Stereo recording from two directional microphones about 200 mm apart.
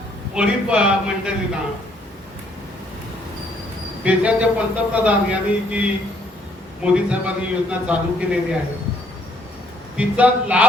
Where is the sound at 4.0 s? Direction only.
5° right (ahead or behind).